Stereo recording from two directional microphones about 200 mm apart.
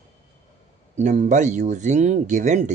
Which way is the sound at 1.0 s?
35° right (ahead or behind).